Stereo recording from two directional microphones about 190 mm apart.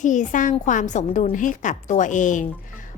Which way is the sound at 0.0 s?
40° left (ahead or behind).